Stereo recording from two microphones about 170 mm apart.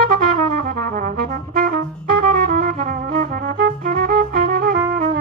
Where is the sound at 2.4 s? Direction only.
60° right (ahead or behind).